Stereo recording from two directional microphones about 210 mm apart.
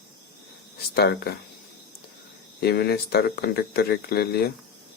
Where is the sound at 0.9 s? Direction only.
50° left (ahead or behind).